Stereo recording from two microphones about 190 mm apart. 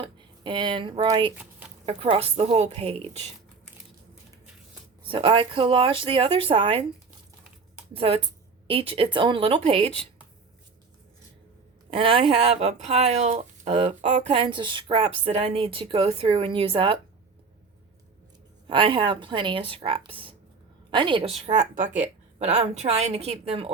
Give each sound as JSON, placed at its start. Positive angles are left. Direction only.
{"t": 0.0, "sound": "speech", "side_deg": -25}
{"t": 5.0, "sound": "a woman's voice", "side_deg": -25}
{"t": 7.9, "sound": "a woman's voice", "side_deg": -30}
{"t": 11.9, "sound": "speech", "side_deg": -30}
{"t": 14.3, "sound": "a woman's voice", "side_deg": -25}
{"t": 18.7, "sound": "a woman's voice", "side_deg": -25}
{"t": 21.4, "sound": "speech", "side_deg": -40}